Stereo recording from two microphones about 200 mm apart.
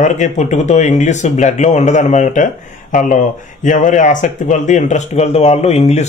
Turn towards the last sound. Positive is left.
turn(degrees=30)  # may be behind; listen again after turning